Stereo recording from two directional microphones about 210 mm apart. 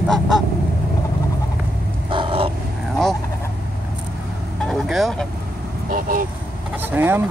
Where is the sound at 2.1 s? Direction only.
25° right (ahead or behind).